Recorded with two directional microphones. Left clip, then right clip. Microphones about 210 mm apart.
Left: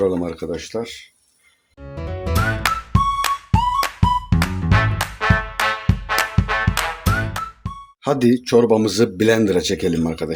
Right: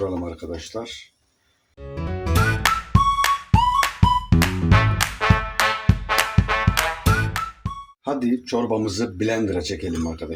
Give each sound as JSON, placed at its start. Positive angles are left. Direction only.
{"t": 0.7, "sound": "speech", "side_deg": 75}
{"t": 1.8, "sound": "music", "side_deg": 0}
{"t": 8.0, "sound": "speech", "side_deg": 50}